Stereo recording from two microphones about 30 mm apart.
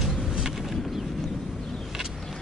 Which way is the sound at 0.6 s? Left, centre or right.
Centre.